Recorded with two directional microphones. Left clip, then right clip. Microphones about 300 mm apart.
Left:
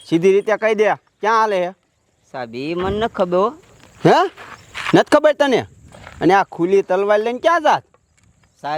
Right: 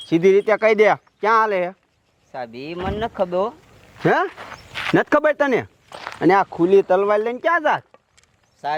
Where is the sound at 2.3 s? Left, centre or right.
Left.